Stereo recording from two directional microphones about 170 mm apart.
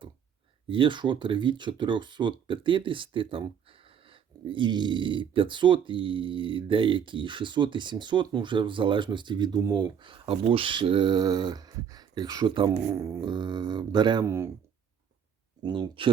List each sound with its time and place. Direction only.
0.7 s speech: 30° right (ahead or behind)
14.3 s speech: 15° right (ahead or behind)
15.6 s speech: 25° right (ahead or behind)